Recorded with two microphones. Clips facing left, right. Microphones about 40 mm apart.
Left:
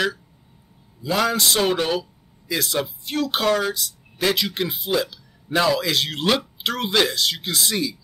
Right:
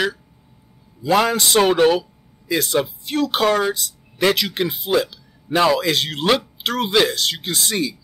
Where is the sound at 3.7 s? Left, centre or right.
Right.